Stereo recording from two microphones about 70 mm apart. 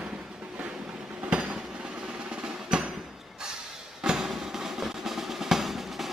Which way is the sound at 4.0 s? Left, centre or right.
Centre.